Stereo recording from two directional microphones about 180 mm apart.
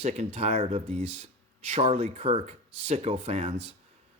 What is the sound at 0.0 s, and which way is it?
Speech, 40° right (ahead or behind).